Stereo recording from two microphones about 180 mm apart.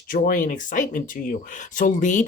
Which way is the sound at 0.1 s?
50° left (ahead or behind).